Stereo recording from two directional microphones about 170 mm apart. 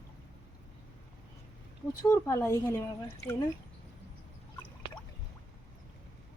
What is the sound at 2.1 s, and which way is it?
Speech, 15° left (ahead or behind).